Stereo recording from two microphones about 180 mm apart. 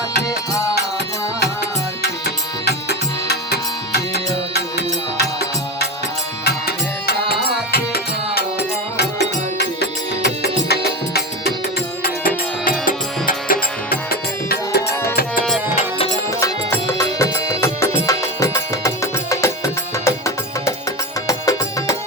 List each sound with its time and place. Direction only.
2.0 s music: 65° left (ahead or behind)
12.8 s music: 50° left (ahead or behind)
16.4 s music: 15° left (ahead or behind)